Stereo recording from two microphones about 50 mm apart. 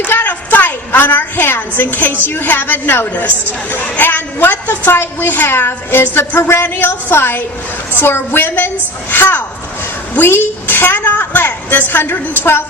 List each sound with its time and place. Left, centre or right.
0.1 s a woman's voice: left
3.7 s a woman's voice: left